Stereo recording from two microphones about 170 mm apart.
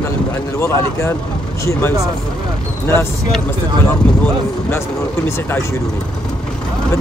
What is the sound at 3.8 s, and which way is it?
Speech, 10° left (ahead or behind).